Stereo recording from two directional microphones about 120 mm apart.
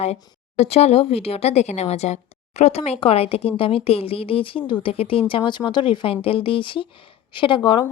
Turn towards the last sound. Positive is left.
turn(degrees=40)  # may be behind; listen again after turning